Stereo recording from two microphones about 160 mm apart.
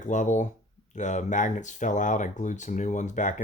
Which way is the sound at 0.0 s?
50° left (ahead or behind).